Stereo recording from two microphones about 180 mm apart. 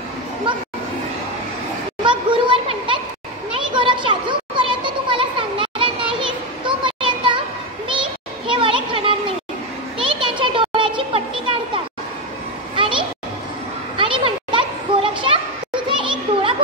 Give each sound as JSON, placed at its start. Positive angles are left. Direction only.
{"t": 2.0, "sound": "children playing", "side_deg": -25}
{"t": 3.5, "sound": "a sound", "side_deg": -25}
{"t": 6.1, "sound": "children playing", "side_deg": -25}
{"t": 8.5, "sound": "children playing", "side_deg": -30}
{"t": 10.2, "sound": "children playing", "side_deg": -25}
{"t": 13.9, "sound": "children playing", "side_deg": -30}